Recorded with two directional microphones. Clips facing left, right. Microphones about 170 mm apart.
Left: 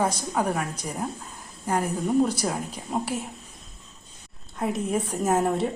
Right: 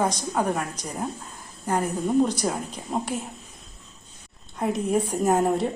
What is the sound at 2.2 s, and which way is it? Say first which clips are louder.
Speech: right 1 dB; 5° left (ahead or behind).